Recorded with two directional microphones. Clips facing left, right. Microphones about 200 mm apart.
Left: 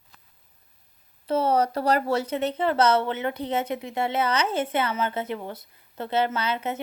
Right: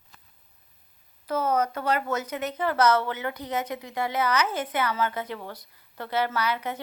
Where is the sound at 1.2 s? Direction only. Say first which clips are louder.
Left 3 dB; 30° left (ahead or behind).